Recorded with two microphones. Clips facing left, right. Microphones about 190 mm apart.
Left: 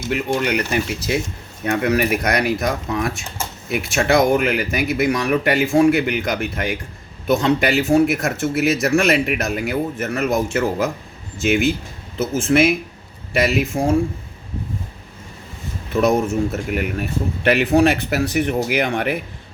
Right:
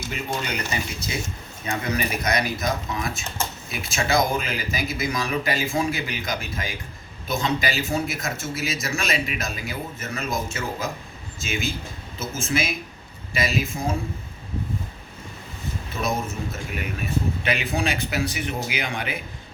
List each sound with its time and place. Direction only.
0.1 s speech: 65° left (ahead or behind)
16.0 s speech: 65° left (ahead or behind)